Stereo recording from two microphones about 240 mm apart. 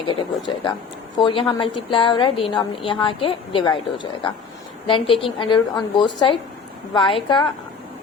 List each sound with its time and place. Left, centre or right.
0.0 s a woman's voice: centre